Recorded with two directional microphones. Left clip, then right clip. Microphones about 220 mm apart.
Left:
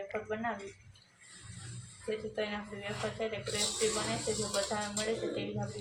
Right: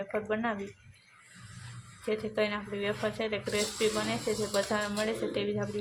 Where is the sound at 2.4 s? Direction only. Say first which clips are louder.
Right 6 dB; 55° right (ahead or behind).